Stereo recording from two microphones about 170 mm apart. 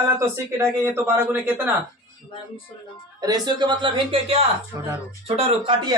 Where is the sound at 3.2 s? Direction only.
25° right (ahead or behind).